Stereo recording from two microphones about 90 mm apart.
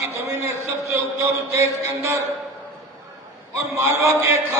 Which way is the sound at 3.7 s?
30° right (ahead or behind).